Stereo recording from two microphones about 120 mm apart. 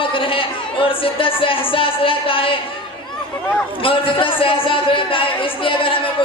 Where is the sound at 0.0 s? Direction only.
45° left (ahead or behind).